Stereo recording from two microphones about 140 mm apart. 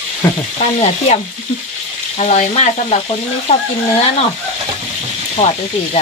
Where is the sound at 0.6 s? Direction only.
50° left (ahead or behind).